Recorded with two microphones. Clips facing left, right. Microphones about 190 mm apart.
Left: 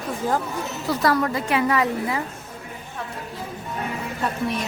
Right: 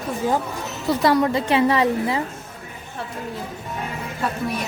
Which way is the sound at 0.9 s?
25° right (ahead or behind).